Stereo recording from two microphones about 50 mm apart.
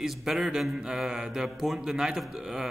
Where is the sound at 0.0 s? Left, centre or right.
Centre.